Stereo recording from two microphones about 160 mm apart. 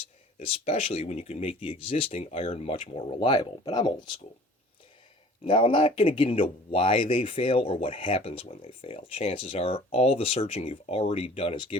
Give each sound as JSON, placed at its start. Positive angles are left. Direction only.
{"t": 0.3, "sound": "speech", "side_deg": 40}
{"t": 5.5, "sound": "speech", "side_deg": 30}